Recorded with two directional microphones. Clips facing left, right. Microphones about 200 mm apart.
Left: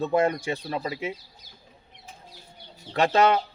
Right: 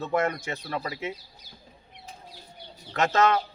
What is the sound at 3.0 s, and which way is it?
Speech, 30° left (ahead or behind).